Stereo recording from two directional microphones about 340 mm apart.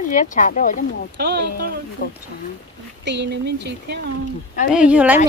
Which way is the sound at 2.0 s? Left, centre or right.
Left.